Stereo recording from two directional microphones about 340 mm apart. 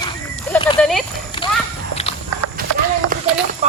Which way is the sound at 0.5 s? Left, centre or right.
Centre.